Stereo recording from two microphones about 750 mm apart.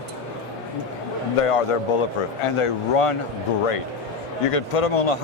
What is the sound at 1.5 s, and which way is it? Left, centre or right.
Speech, left.